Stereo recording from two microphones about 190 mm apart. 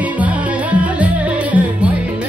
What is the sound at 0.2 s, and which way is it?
Music, 10° right (ahead or behind).